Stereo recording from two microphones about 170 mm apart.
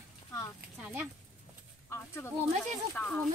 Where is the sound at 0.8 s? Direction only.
10° right (ahead or behind).